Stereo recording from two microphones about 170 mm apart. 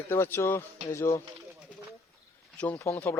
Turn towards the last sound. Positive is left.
turn(degrees=10)  # may be behind; listen again after turning